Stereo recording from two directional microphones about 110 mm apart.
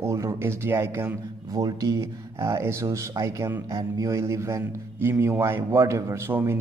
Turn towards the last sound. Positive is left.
turn(degrees=-20)  # may be behind; listen again after turning